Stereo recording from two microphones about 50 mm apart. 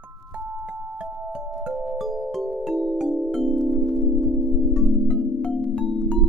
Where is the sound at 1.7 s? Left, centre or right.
Centre.